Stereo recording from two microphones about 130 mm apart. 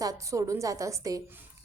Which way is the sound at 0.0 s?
25° right (ahead or behind).